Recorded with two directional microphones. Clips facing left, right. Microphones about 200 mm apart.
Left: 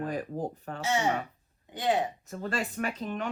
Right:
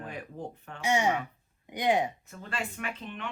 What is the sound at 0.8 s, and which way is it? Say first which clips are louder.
Speech: right 1 dB; 15° right (ahead or behind).